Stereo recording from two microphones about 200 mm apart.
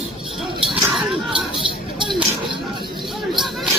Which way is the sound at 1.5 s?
25° right (ahead or behind).